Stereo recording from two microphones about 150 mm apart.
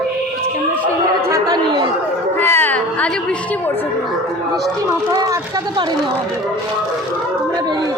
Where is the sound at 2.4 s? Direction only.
15° left (ahead or behind).